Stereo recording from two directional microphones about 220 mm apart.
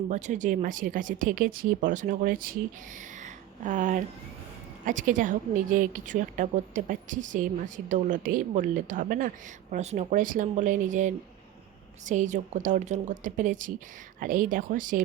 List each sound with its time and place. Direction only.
0.1 s a woman's voice: 35° right (ahead or behind)
3.2 s a sound: 35° right (ahead or behind)
4.9 s a woman's voice: 35° right (ahead or behind)